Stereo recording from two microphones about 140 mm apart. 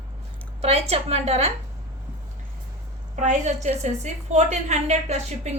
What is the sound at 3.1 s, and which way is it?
A woman's voice, 60° right (ahead or behind).